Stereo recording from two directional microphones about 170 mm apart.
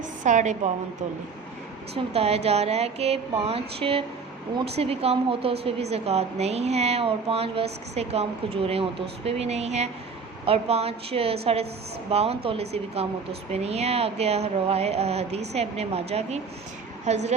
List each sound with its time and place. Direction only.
0.3 s a woman's voice: 45° right (ahead or behind)
2.1 s speech: 35° right (ahead or behind)